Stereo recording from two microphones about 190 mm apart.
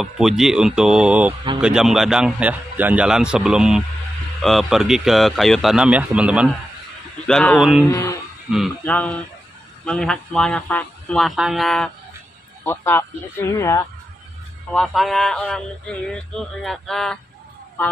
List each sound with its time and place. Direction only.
0.0 s speech: centre (ahead or behind)
7.2 s speech: 5° left (ahead or behind)
7.8 s speech: 15° left (ahead or behind)
12.6 s speech: 10° left (ahead or behind)
14.7 s speech: centre (ahead or behind)